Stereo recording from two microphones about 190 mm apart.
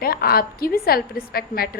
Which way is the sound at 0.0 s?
50° left (ahead or behind).